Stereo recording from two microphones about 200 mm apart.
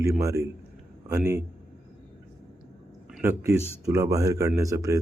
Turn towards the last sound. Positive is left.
turn(degrees=-15)  # may be behind; listen again after turning